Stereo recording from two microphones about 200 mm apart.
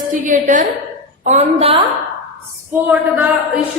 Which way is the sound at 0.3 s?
40° right (ahead or behind).